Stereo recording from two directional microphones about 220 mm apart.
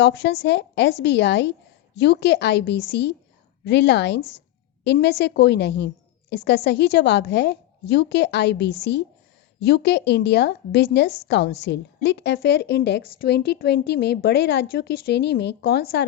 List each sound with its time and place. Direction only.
0.0 s a woman's voice: 55° left (ahead or behind)